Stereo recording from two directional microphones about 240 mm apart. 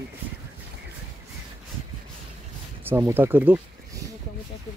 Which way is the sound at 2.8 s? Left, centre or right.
Centre.